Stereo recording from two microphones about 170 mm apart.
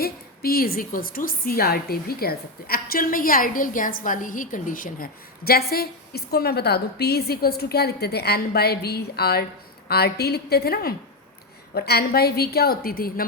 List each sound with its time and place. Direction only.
0.0 s a woman's voice: 60° left (ahead or behind)
5.5 s a woman's voice: 65° left (ahead or behind)